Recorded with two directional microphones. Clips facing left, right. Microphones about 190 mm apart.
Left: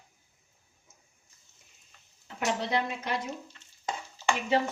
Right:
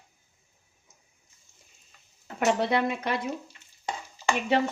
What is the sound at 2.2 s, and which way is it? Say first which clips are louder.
Speech: right 6 dB; 60° right (ahead or behind).